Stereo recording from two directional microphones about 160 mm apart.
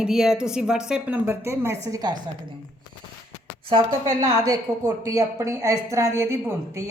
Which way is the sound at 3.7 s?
25° right (ahead or behind).